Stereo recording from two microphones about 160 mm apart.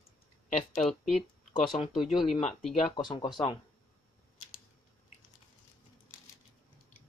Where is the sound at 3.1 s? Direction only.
30° left (ahead or behind).